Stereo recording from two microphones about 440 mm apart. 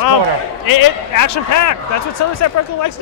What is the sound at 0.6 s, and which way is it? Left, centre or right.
A man's voice, left.